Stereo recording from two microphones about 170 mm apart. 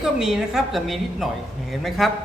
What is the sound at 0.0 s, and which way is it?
A woman's voice, centre (ahead or behind).